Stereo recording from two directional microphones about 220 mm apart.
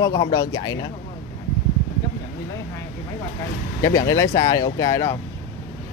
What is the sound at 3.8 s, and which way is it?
Speech, 15° left (ahead or behind).